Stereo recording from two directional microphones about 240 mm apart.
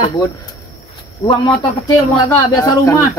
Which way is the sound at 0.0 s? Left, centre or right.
Centre.